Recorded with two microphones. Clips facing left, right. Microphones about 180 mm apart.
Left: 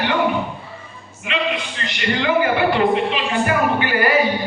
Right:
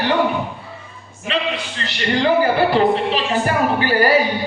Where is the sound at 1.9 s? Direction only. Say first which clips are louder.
Right 2 dB; 35° right (ahead or behind).